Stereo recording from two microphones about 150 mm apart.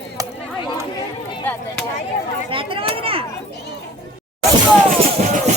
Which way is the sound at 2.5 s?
35° right (ahead or behind).